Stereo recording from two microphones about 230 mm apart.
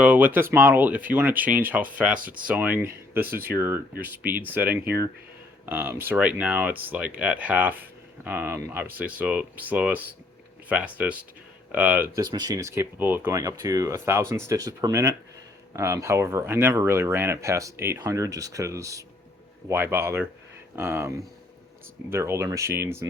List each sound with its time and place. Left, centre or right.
0.0 s speech: centre
22.1 s speech: centre